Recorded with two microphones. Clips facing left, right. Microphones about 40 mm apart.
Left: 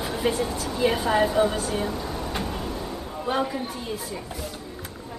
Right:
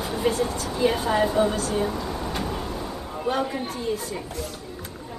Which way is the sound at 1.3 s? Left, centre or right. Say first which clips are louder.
Even; left.